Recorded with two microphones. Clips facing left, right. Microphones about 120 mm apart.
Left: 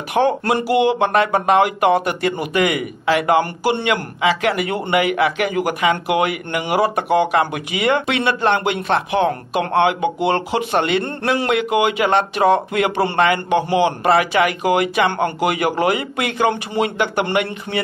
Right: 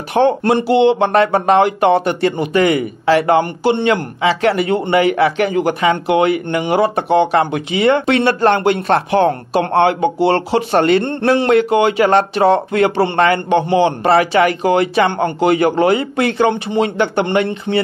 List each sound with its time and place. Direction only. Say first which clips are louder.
0.1 s speech: right 4 dB; 30° right (ahead or behind)